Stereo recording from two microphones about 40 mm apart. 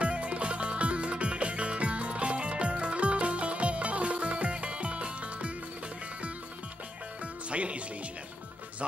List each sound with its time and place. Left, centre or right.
0.0 s music: right
7.5 s music: right